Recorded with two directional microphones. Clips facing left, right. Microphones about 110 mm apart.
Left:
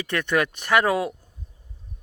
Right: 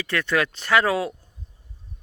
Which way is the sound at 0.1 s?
20° left (ahead or behind).